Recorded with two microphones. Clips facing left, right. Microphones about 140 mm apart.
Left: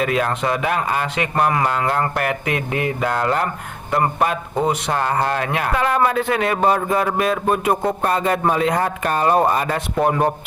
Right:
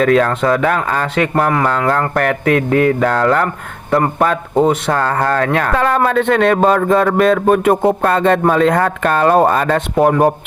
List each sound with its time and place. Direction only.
0.0 s speech: 50° right (ahead or behind)
6.1 s a man's voice: 65° right (ahead or behind)